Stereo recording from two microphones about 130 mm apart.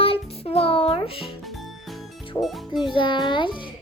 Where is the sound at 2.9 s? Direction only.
35° left (ahead or behind).